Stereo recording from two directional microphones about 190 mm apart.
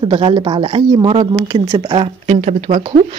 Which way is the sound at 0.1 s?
25° right (ahead or behind).